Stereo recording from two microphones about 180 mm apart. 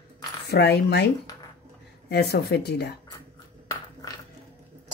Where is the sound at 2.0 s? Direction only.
65° left (ahead or behind).